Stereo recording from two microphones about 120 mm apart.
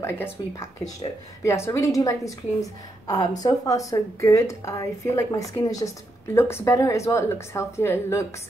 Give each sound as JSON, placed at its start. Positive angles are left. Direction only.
{"t": 0.0, "sound": "a woman's voice", "side_deg": 20}